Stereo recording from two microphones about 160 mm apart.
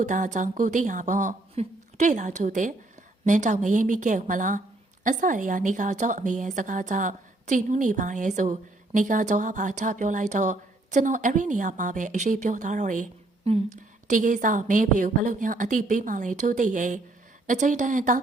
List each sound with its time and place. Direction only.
0.0 s a woman's voice: 50° right (ahead or behind)